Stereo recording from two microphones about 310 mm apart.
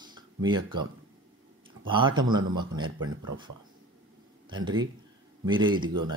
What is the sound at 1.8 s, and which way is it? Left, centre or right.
Speech, centre.